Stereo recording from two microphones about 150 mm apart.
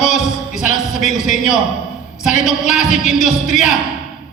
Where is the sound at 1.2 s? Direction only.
55° left (ahead or behind).